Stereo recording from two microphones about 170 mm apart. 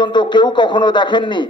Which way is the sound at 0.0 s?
25° left (ahead or behind).